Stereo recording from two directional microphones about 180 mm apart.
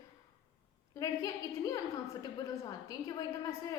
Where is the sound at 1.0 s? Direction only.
20° left (ahead or behind).